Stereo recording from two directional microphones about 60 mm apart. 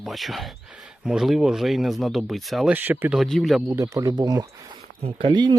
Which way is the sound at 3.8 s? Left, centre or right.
Right.